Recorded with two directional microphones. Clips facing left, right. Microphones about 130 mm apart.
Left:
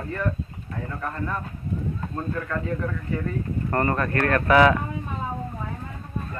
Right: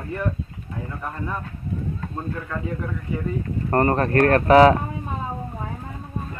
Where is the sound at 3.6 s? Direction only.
35° right (ahead or behind).